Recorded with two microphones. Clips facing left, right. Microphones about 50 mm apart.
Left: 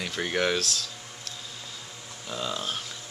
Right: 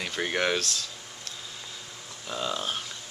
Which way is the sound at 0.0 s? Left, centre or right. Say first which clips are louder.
Even; centre.